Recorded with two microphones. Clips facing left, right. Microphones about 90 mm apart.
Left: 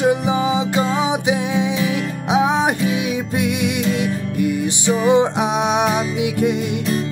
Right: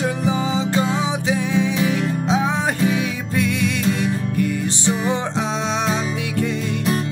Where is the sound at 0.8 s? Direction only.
15° left (ahead or behind).